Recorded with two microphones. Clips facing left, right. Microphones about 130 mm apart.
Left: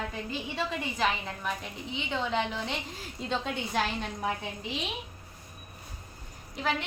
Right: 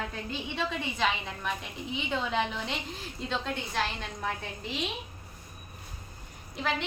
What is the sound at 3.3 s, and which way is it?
A woman's voice, 15° left (ahead or behind).